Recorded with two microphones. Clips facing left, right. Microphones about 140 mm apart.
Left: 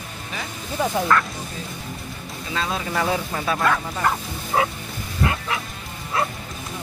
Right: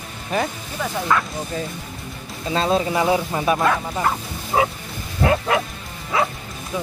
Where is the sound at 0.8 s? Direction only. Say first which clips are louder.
Left 4 dB; 25° left (ahead or behind).